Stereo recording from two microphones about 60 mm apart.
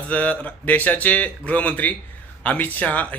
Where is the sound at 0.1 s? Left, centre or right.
Left.